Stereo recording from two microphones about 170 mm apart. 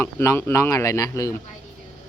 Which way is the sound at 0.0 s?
15° left (ahead or behind).